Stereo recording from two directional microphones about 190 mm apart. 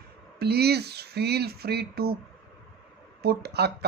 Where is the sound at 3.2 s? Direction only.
55° right (ahead or behind).